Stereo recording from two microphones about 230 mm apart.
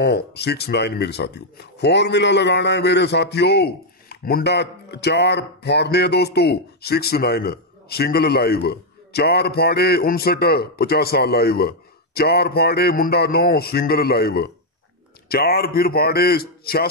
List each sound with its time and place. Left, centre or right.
0.0 s a man's voice: left